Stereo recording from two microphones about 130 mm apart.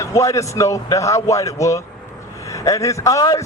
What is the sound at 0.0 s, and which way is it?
A man's voice, 25° left (ahead or behind).